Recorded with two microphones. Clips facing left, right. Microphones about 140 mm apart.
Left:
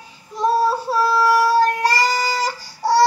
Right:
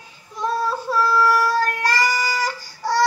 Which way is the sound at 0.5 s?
30° left (ahead or behind).